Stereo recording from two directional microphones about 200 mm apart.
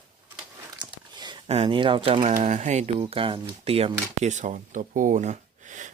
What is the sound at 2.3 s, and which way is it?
Speech, 35° right (ahead or behind).